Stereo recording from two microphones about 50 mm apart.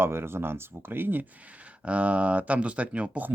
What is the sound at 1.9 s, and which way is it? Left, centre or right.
Speech, right.